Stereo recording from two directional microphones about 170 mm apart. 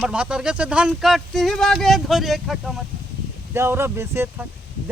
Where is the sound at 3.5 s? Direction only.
15° right (ahead or behind).